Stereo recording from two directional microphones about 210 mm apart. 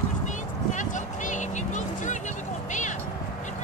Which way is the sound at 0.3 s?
35° left (ahead or behind).